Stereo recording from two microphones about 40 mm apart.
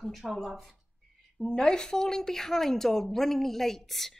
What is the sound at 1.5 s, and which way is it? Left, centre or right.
Speech, centre.